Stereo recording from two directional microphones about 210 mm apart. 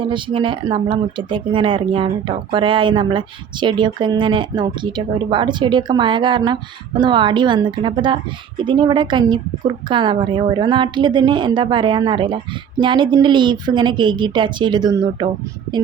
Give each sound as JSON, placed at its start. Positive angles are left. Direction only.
{"t": 0.1, "sound": "speech", "side_deg": -25}